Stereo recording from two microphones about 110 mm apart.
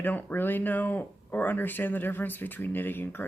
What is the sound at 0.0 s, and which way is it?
Speech, 15° left (ahead or behind).